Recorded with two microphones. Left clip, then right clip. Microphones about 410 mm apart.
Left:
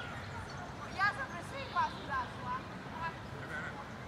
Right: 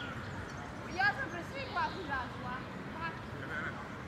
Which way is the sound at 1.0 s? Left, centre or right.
Left.